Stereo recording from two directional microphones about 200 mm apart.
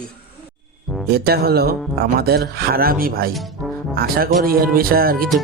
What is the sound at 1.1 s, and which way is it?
Speech, 50° right (ahead or behind).